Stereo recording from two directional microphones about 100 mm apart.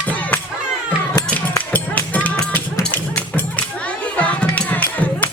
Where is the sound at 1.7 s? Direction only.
15° left (ahead or behind).